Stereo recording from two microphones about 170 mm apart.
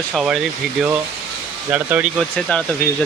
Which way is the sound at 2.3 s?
5° left (ahead or behind).